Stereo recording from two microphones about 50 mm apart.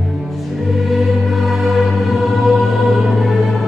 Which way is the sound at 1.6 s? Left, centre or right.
Centre.